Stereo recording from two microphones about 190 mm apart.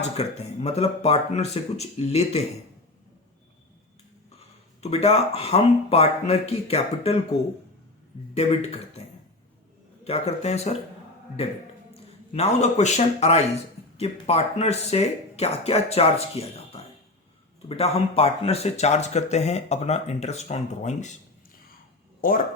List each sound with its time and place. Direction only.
0.0 s speech: 35° left (ahead or behind)
4.8 s speech: 35° left (ahead or behind)
10.0 s speech: 35° left (ahead or behind)
12.3 s speech: 35° left (ahead or behind)
22.2 s speech: 45° left (ahead or behind)